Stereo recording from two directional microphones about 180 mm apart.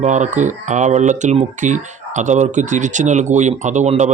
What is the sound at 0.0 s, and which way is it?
Speech, 40° right (ahead or behind).